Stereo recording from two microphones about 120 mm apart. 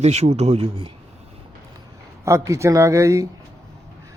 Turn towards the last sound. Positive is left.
turn(degrees=-25)  # may be behind; listen again after turning